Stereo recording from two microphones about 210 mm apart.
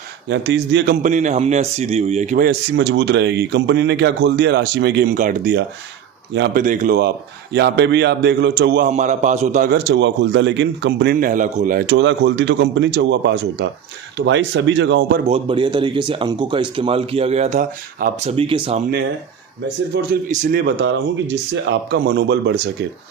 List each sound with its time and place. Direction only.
0.3 s speech: 55° right (ahead or behind)
1.0 s speech: 35° right (ahead or behind)
6.3 s speech: 60° right (ahead or behind)
6.6 s speech: 40° right (ahead or behind)
7.5 s speech: 55° right (ahead or behind); by 9.6 s 35° right (ahead or behind)
9.7 s speech: 55° right (ahead or behind); by 11.8 s 40° right (ahead or behind)
11.9 s speech: 55° right (ahead or behind)
15.2 s speech: 25° right (ahead or behind)
19.9 s speech: 50° right (ahead or behind)
20.3 s speech: 40° right (ahead or behind)